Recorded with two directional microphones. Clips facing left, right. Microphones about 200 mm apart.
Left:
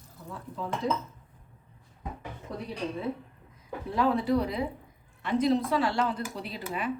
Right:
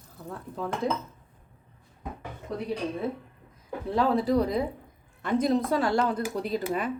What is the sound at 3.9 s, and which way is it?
A woman's voice, 35° right (ahead or behind).